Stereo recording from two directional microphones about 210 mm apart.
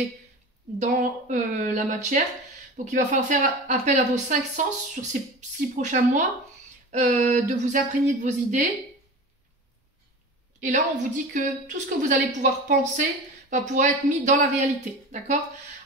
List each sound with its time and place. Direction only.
0.7 s speech: 35° right (ahead or behind)
10.6 s a woman's voice: 35° right (ahead or behind)